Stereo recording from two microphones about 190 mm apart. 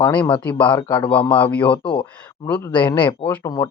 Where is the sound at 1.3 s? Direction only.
10° left (ahead or behind).